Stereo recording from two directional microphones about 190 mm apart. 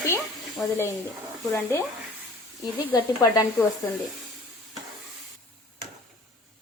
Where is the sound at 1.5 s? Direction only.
10° left (ahead or behind).